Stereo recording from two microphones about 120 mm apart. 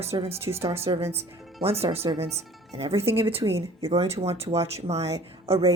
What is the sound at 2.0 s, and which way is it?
Speech, 35° right (ahead or behind).